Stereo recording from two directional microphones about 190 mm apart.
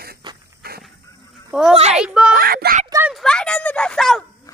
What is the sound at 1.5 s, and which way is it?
Speech, 5° right (ahead or behind).